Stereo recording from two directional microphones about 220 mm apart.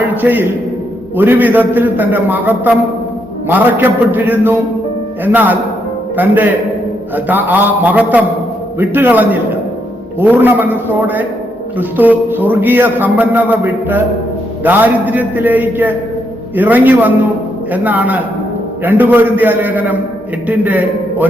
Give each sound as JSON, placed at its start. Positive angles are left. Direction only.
{"t": 0.2, "sound": "a man's voice", "side_deg": -10}